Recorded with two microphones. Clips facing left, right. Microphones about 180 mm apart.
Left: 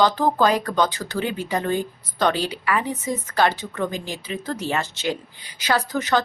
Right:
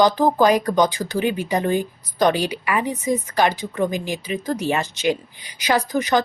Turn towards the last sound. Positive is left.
turn(degrees=-15)  # may be behind; listen again after turning